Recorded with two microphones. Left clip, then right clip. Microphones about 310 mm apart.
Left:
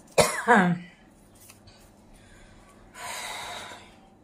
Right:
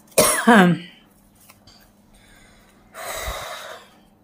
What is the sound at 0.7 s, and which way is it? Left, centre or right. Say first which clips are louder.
Speech: right 8 dB; right.